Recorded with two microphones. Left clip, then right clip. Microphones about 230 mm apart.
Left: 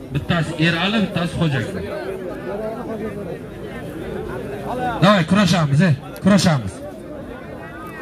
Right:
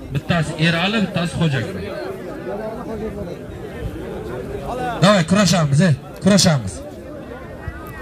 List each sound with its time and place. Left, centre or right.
0.1 s a man's voice: right
4.8 s a man's voice: right